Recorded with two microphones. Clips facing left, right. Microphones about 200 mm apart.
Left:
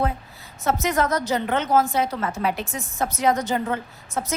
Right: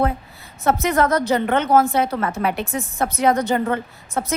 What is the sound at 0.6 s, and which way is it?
A woman's voice, 55° right (ahead or behind).